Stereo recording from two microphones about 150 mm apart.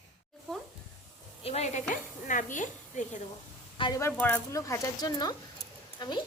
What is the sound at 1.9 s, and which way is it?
Dishes, 60° left (ahead or behind).